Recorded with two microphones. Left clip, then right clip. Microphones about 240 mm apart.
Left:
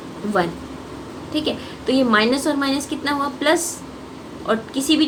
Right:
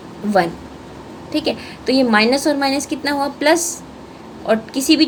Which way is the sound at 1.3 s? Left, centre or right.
Right.